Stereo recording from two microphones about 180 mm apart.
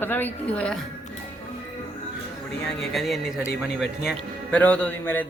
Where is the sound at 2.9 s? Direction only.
Centre (ahead or behind).